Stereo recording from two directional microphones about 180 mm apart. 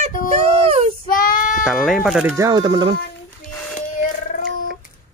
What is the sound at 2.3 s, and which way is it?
Speech, 20° right (ahead or behind).